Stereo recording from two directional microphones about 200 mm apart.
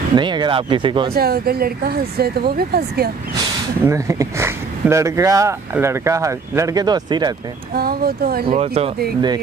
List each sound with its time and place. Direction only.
0.1 s speech: 20° right (ahead or behind)
1.1 s speech: 50° right (ahead or behind)
3.8 s speech: 15° right (ahead or behind)
7.7 s speech: 50° right (ahead or behind)
8.5 s speech: 30° right (ahead or behind)